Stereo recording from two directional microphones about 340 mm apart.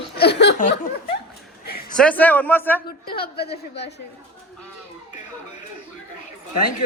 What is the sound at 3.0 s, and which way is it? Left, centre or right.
Speech, left.